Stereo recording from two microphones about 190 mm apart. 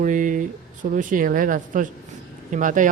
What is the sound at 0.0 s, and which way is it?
A man's voice, 40° right (ahead or behind).